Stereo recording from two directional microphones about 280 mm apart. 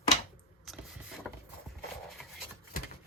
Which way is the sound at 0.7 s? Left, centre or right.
Centre.